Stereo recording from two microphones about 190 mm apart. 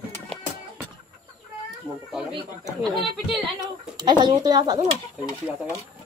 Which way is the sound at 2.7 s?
Centre (ahead or behind).